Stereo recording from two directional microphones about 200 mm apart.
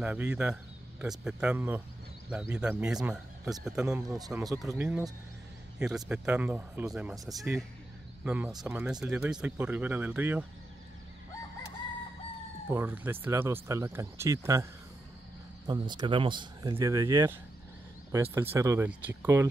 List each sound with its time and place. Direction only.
0.0 s speech: 5° right (ahead or behind)
12.6 s speech: 10° right (ahead or behind)